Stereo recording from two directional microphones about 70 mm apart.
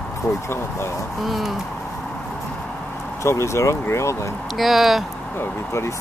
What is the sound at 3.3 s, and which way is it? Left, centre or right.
Speech, left.